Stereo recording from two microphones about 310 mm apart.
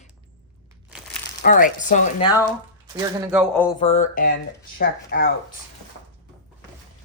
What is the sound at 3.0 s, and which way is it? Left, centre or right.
Speech, centre.